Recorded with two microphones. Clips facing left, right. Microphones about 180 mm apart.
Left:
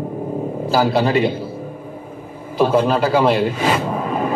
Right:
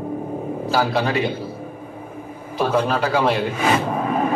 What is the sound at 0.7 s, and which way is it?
Speech, 35° left (ahead or behind).